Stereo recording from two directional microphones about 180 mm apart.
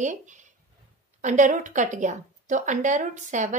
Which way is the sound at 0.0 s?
45° right (ahead or behind).